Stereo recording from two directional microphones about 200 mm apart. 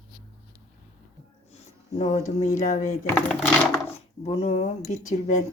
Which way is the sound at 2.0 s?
40° left (ahead or behind).